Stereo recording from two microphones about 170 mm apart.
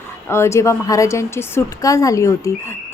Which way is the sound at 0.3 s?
15° left (ahead or behind).